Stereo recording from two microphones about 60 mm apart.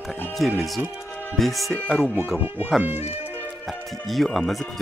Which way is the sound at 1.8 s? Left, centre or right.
Centre.